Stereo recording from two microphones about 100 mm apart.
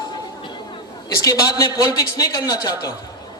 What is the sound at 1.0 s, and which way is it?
Speech, 35° left (ahead or behind).